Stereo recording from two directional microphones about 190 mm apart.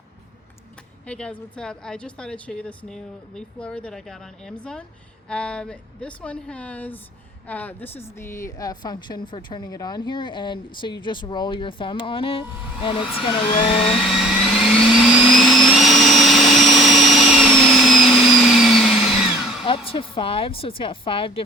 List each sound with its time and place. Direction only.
1.0 s a woman's voice: 5° left (ahead or behind); by 13.7 s 25° left (ahead or behind)
13.7 s vehicle: centre (ahead or behind)
19.6 s a woman's voice: 30° left (ahead or behind)